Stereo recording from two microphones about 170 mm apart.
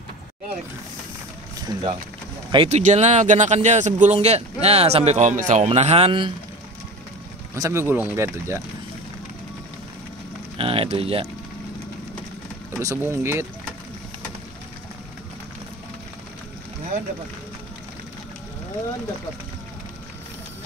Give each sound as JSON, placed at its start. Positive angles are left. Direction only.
{"t": 1.7, "sound": "speech", "side_deg": -25}
{"t": 2.8, "sound": "speech", "side_deg": -45}
{"t": 5.7, "sound": "speech", "side_deg": -40}
{"t": 7.5, "sound": "speech", "side_deg": -20}
{"t": 10.6, "sound": "a sound", "side_deg": -35}
{"t": 12.7, "sound": "speech", "side_deg": -15}